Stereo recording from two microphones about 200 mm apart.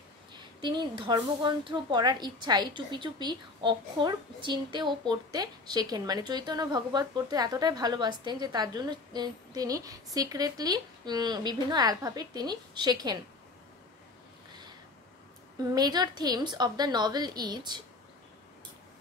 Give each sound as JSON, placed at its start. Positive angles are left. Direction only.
{"t": 0.6, "sound": "a woman's voice", "side_deg": -20}
{"t": 15.7, "sound": "a woman's voice", "side_deg": -20}